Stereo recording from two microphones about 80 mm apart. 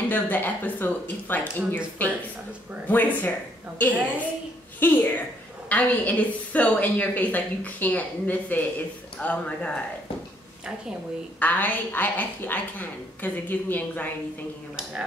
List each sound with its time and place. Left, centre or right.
0.1 s a woman's voice: left
11.3 s a woman's voice: centre